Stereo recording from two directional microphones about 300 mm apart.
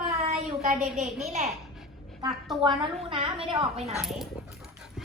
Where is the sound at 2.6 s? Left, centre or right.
Centre.